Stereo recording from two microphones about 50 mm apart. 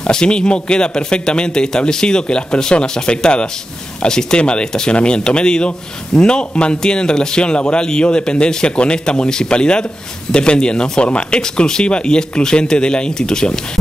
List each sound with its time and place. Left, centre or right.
0.0 s speech: centre